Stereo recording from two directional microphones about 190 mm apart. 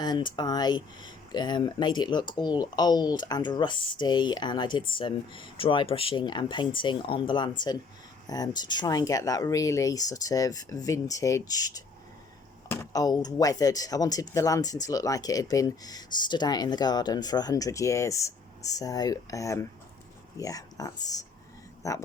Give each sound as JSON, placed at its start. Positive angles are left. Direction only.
{"t": 0.0, "sound": "speech", "side_deg": 20}